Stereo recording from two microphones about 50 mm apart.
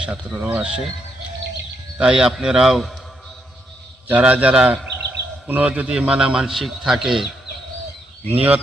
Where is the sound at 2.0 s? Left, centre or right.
Centre.